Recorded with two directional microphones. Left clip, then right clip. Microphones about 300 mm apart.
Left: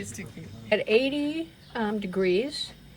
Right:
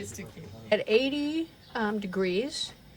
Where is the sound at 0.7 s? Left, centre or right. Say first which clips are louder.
Left 2 dB; centre.